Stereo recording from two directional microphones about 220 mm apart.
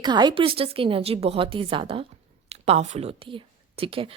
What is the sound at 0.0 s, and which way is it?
Speech, 20° right (ahead or behind).